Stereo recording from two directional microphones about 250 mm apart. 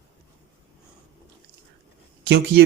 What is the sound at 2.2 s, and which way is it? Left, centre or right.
Speech, right.